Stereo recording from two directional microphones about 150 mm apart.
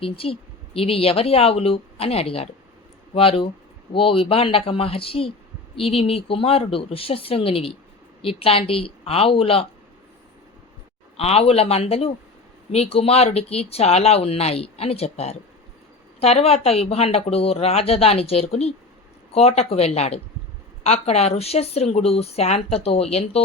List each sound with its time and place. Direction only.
0.0 s a woman's voice: 40° left (ahead or behind)
11.2 s speech: 45° left (ahead or behind)